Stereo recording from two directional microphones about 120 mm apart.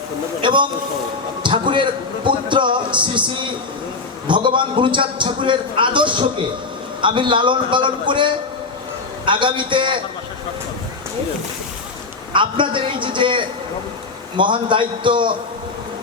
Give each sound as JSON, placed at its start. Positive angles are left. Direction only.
{"t": 0.4, "sound": "a man's voice", "side_deg": -45}
{"t": 12.3, "sound": "a man's voice", "side_deg": -45}